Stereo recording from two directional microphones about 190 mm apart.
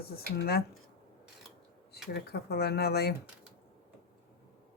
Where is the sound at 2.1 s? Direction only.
55° left (ahead or behind).